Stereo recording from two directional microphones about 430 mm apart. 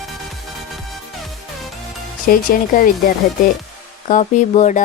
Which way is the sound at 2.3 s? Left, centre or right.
Centre.